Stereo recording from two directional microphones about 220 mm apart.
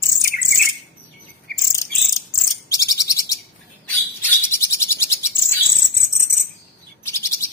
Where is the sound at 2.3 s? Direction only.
15° left (ahead or behind).